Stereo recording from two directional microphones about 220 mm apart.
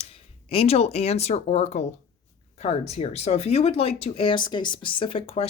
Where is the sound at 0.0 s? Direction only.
25° left (ahead or behind).